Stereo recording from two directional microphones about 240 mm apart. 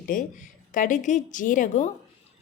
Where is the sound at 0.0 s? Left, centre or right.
Left.